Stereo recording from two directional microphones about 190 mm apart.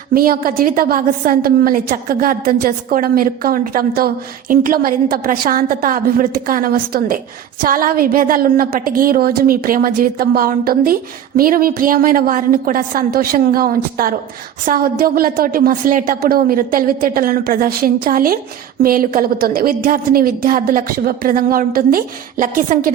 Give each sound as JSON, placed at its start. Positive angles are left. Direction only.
{"t": 0.1, "sound": "a woman's voice", "side_deg": -50}